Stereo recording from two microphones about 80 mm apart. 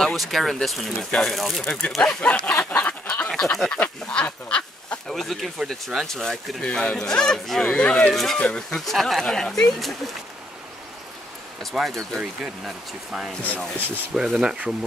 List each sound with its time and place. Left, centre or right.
0.0 s speech: centre
2.0 s speech: centre
2.7 s a sound: centre
3.3 s duck: centre
5.1 s speech: centre
8.1 s speech: centre
11.7 s speech: centre
13.7 s speech: right
14.1 s speech: centre